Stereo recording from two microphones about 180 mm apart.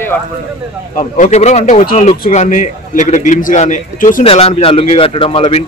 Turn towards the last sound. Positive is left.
turn(degrees=30)  # may be behind; listen again after turning